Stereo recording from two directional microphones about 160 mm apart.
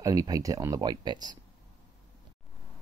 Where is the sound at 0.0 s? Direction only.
20° right (ahead or behind).